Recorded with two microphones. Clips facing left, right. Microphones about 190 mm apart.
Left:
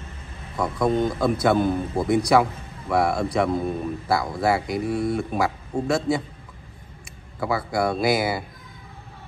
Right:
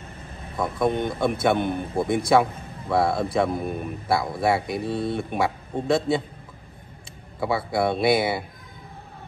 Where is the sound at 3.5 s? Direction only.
25° left (ahead or behind).